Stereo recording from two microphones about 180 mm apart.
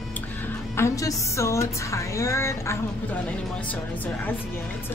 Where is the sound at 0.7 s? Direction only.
15° left (ahead or behind).